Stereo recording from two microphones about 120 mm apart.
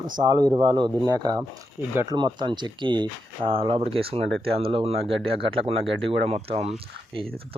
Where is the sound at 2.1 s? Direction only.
40° right (ahead or behind).